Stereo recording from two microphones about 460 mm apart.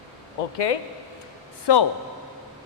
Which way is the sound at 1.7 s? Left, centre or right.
Left.